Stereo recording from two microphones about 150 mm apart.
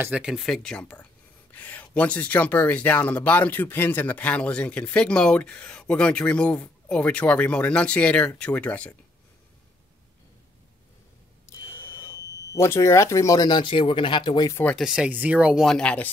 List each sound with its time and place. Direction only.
0.0 s speech: 5° right (ahead or behind)
11.4 s speech: 20° left (ahead or behind)
14.5 s speech: 10° left (ahead or behind)
14.8 s speech: 5° right (ahead or behind)